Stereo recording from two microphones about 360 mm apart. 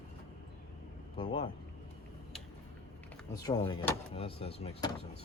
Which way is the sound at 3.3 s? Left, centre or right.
Centre.